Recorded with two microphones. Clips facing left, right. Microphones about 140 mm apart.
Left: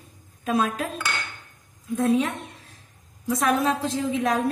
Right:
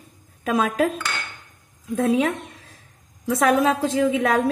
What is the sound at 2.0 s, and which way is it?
Speech, 90° right.